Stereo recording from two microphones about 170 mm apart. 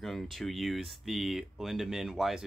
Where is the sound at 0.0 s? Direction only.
Centre (ahead or behind).